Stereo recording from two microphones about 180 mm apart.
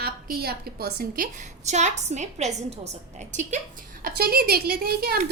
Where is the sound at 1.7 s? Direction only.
40° right (ahead or behind).